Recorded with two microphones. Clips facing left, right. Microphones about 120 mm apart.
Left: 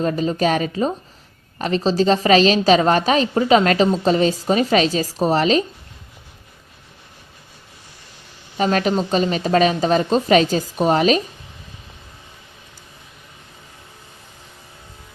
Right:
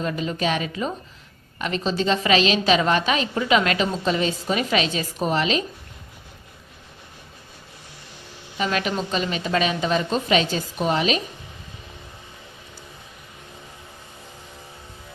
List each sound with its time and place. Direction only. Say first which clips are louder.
0.0 s a woman's voice: left 6 dB; 40° left (ahead or behind)
8.5 s a woman's voice: left 6 dB; 40° left (ahead or behind)